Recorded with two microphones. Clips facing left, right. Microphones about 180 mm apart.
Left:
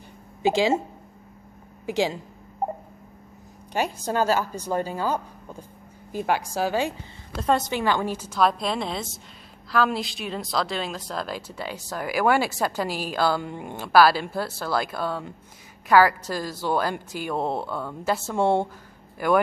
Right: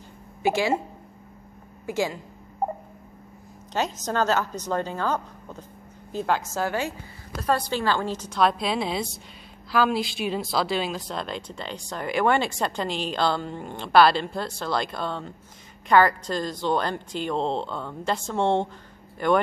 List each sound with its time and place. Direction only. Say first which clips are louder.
0.4 s speech: left 2 dB; 20° left (ahead or behind)
1.9 s speech: left 2 dB; 15° left (ahead or behind)
3.7 s speech: left 1 dB; 10° left (ahead or behind)